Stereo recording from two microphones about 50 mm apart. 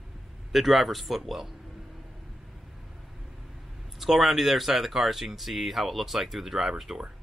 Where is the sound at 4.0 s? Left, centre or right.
Centre.